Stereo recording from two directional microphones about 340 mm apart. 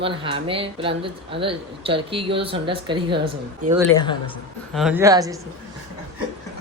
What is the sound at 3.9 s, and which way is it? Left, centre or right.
Speech, centre.